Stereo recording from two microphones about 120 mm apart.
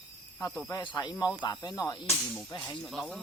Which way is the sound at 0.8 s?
40° left (ahead or behind).